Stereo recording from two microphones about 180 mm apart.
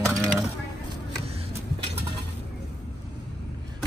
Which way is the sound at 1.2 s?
35° right (ahead or behind).